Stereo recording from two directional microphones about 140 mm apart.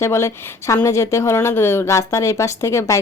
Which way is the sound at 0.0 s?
20° left (ahead or behind).